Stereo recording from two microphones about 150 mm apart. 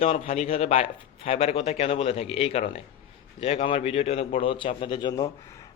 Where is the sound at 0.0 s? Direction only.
40° left (ahead or behind).